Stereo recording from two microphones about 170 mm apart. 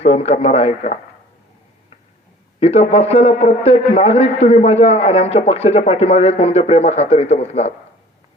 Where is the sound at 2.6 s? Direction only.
35° left (ahead or behind).